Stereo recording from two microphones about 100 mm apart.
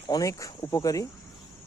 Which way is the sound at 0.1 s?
35° left (ahead or behind).